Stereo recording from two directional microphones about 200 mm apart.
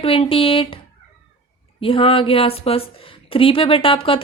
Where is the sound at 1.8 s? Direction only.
25° left (ahead or behind).